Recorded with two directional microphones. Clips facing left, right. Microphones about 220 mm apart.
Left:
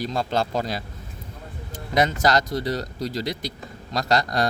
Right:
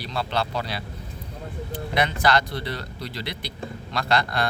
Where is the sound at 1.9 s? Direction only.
40° left (ahead or behind).